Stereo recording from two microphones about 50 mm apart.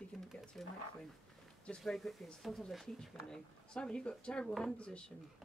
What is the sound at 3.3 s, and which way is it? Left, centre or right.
Speech, centre.